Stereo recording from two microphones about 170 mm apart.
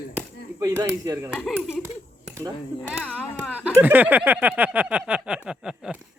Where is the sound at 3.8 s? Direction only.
10° right (ahead or behind).